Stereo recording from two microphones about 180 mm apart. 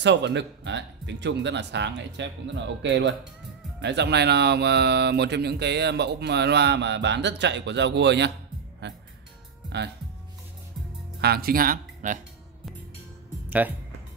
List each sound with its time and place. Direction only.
0.0 s speech: 75° right (ahead or behind)
3.8 s speech: 70° right (ahead or behind)
11.1 s speech: 60° right (ahead or behind)
13.5 s speech: 10° right (ahead or behind)